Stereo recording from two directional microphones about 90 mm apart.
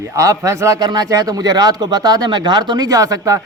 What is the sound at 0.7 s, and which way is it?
Speech, 50° right (ahead or behind).